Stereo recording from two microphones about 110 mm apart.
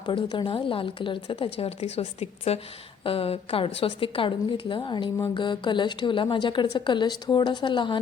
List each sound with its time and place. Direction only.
0.0 s a woman's voice: 45° left (ahead or behind); by 2.6 s 70° left (ahead or behind)
3.0 s a woman's voice: 60° left (ahead or behind)